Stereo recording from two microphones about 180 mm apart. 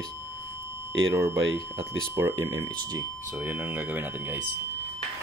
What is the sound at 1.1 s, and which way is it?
Speech, 15° right (ahead or behind).